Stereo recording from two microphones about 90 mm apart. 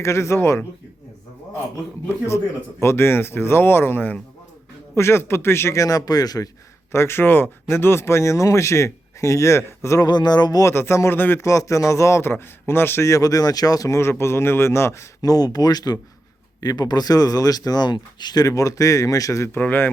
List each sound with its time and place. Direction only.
0.0 s speech: 35° left (ahead or behind)
2.0 s speech: 30° left (ahead or behind)
6.9 s speech: 30° left (ahead or behind)
10.0 s speech: 50° left (ahead or behind)
10.6 s speech: 30° left (ahead or behind)
11.4 s speech: 35° left (ahead or behind)
15.2 s speech: 45° left (ahead or behind)
19.5 s speech: 20° left (ahead or behind)